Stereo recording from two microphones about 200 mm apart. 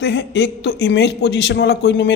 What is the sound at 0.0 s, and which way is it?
A woman's voice, 60° left (ahead or behind).